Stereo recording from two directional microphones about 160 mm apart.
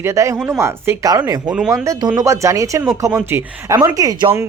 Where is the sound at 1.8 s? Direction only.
20° right (ahead or behind).